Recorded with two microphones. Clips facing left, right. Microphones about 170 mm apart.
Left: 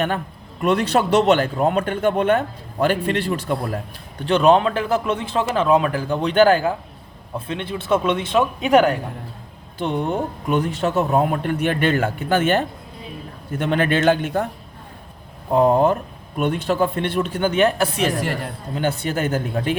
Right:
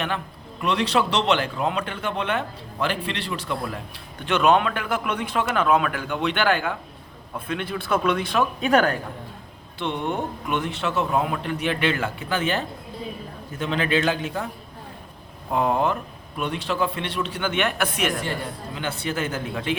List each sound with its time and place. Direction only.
0.6 s a man's voice: 50° left (ahead or behind)
4.3 s a man's voice: 35° left (ahead or behind); by 9.0 s 20° left (ahead or behind)
9.7 s a man's voice: 40° left (ahead or behind)
15.5 s a man's voice: 35° left (ahead or behind)
16.4 s a man's voice: 50° left (ahead or behind); by 18.1 s 30° left (ahead or behind)
18.7 s a man's voice: 45° left (ahead or behind)